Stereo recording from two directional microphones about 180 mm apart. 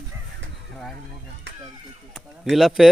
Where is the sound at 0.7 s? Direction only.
Centre (ahead or behind).